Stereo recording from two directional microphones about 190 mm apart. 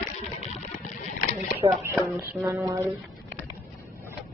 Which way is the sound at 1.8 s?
10° right (ahead or behind).